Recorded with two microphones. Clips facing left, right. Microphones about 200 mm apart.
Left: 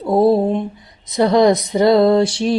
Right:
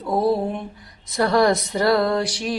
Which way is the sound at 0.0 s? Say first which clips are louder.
Left 7 dB; 25° left (ahead or behind).